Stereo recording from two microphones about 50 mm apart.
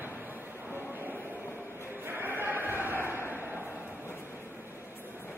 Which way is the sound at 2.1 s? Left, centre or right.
Right.